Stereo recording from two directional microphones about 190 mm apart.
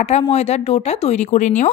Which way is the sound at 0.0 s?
35° left (ahead or behind).